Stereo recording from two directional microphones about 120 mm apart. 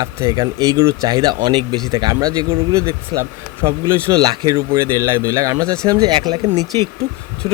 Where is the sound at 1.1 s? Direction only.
35° right (ahead or behind).